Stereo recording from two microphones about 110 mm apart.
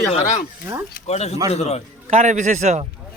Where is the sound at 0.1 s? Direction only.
90° left.